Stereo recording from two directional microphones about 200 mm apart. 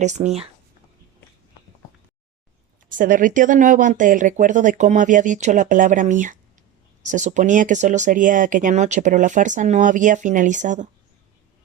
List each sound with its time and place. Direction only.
0.0 s speech: 35° right (ahead or behind)
3.0 s speech: 40° right (ahead or behind)